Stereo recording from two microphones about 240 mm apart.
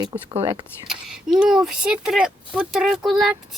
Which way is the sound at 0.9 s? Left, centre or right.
Centre.